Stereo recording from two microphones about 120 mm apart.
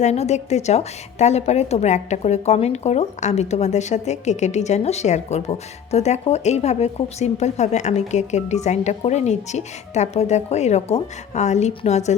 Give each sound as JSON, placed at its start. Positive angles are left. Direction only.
{"t": 0.0, "sound": "a woman's voice", "side_deg": 65}